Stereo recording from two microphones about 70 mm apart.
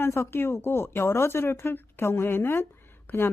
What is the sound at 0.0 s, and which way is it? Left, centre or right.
Speech, left.